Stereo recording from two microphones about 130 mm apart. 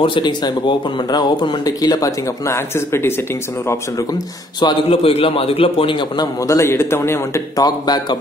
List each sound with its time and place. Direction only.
0.0 s speech: 35° left (ahead or behind); by 3.2 s 20° left (ahead or behind)
3.6 s speech: 30° left (ahead or behind)
4.8 s a man's voice: 45° left (ahead or behind)
6.4 s a man's voice: 20° left (ahead or behind)